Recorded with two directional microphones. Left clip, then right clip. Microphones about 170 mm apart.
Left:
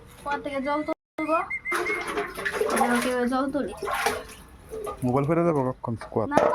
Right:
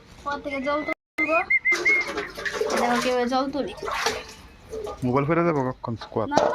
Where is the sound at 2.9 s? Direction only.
40° left (ahead or behind).